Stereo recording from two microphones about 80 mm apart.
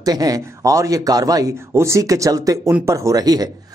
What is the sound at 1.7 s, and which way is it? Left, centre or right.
Speech, right.